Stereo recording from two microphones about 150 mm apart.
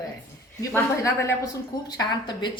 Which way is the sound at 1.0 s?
20° left (ahead or behind).